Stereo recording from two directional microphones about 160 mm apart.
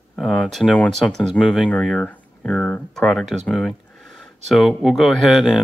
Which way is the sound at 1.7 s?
5° left (ahead or behind).